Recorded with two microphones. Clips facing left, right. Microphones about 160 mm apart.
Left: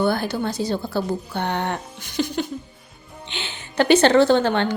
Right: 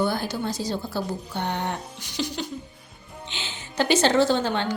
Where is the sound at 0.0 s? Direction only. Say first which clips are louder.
Left 4 dB; 60° left (ahead or behind).